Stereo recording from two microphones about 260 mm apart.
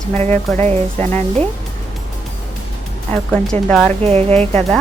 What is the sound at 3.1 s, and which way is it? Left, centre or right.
Speech, centre.